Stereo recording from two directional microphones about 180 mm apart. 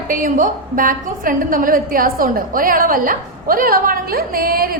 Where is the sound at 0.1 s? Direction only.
45° right (ahead or behind).